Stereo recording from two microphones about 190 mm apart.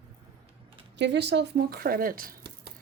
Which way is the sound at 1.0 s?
65° right (ahead or behind).